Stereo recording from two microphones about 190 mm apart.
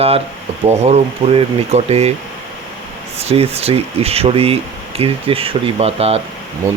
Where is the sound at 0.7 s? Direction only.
35° right (ahead or behind).